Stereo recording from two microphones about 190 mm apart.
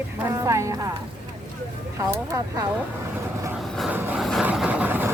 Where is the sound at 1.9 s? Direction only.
15° right (ahead or behind).